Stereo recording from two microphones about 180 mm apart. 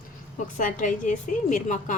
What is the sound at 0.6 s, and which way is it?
A woman's voice, 45° left (ahead or behind).